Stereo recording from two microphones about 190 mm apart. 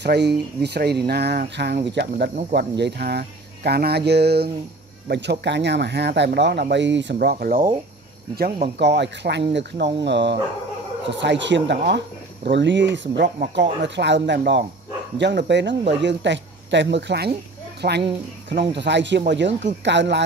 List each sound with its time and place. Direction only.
0.0 s speech: 60° right (ahead or behind)
8.7 s speech: 65° right (ahead or behind)